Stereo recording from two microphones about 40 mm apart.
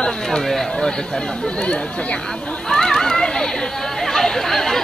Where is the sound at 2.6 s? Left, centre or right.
Centre.